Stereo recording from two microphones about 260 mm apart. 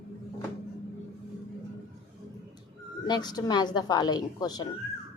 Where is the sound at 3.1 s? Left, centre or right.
Centre.